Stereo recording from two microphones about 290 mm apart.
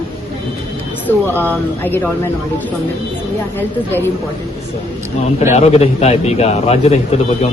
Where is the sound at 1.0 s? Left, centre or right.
Centre.